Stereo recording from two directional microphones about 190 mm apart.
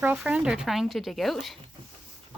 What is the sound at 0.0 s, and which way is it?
Speech, 10° right (ahead or behind).